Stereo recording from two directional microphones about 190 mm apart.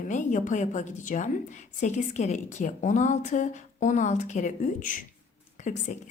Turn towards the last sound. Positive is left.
turn(degrees=40)  # may be behind; listen again after turning